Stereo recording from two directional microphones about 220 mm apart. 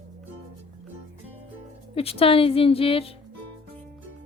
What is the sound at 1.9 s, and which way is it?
A woman's voice, 25° left (ahead or behind).